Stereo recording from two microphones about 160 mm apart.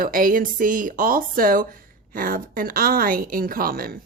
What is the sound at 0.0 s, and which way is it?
Speech, 60° right (ahead or behind).